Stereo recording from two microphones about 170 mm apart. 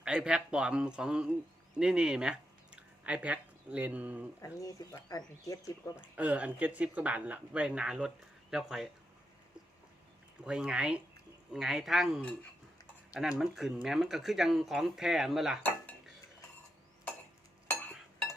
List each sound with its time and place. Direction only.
0.0 s a man's voice: 5° right (ahead or behind)
4.4 s speech: 20° left (ahead or behind)
6.0 s speech: 10° right (ahead or behind)
10.4 s speech: 5° right (ahead or behind)